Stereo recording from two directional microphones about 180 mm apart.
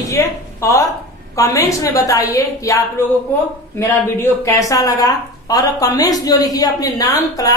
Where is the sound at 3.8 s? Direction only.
15° left (ahead or behind).